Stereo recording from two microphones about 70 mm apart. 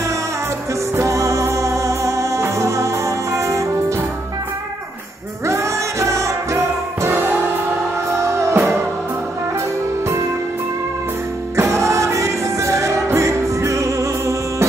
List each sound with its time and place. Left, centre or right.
0.9 s music: right
5.5 s music: right
8.2 s music: right
11.5 s music: right